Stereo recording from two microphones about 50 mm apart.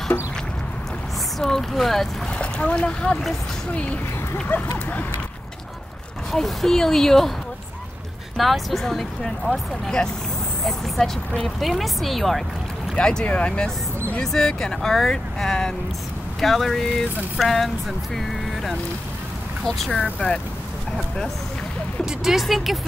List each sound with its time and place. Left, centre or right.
1.4 s speech: centre
2.3 s speech: left
6.3 s speech: centre
8.4 s speech: centre
11.7 s speech: centre
12.9 s speech: centre
14.2 s speech: centre
19.9 s speech: left
22.2 s speech: centre